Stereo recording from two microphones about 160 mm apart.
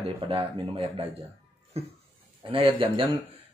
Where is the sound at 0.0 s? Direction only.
35° right (ahead or behind).